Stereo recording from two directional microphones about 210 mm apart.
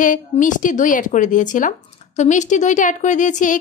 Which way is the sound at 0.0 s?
40° left (ahead or behind).